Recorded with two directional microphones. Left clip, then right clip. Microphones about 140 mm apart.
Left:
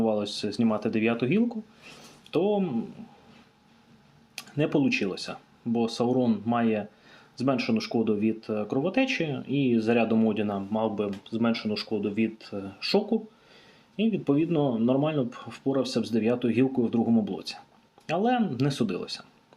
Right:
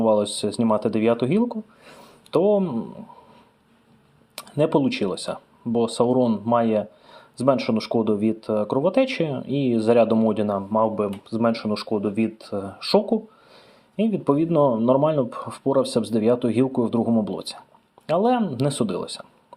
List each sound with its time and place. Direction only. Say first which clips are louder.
0.0 s speech: right 7 dB; 40° right (ahead or behind)
4.4 s speech: right 6 dB; 40° right (ahead or behind)